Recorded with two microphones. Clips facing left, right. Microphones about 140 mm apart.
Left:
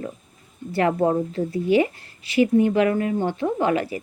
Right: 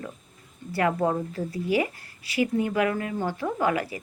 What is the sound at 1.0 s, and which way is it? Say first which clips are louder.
Speech: left 5 dB; 25° left (ahead or behind).